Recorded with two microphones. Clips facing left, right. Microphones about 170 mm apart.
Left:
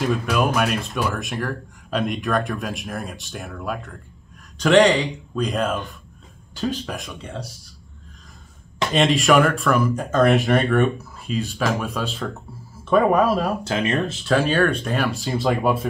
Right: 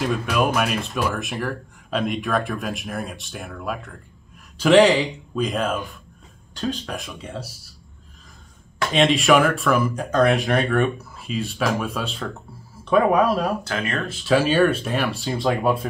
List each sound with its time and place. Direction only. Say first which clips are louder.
0.0 s speech: left 1 dB; centre (ahead or behind)
8.9 s speech: even; centre (ahead or behind)
13.7 s speech: left 4 dB; 25° left (ahead or behind)
14.2 s speech: right 3 dB; centre (ahead or behind)